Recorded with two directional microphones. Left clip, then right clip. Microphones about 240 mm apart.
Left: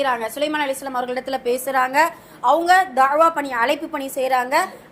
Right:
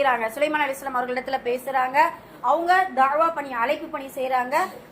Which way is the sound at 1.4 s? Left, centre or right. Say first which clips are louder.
Left 6 dB; left.